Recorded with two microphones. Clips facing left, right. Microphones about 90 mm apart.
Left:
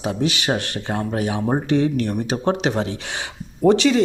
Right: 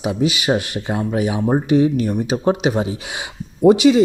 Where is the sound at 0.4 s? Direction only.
15° right (ahead or behind).